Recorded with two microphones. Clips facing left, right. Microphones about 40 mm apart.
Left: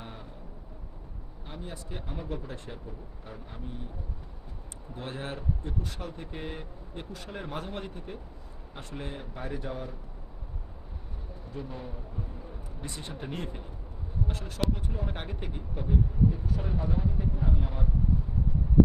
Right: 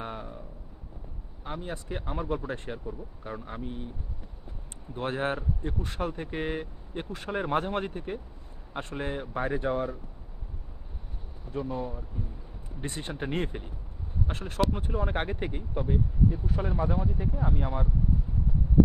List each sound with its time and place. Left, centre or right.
0.0 s a sound: right
1.6 s speech: right
4.9 s speech: right
11.5 s speech: right